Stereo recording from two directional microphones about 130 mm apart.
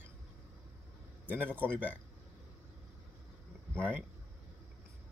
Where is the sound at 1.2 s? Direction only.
15° right (ahead or behind).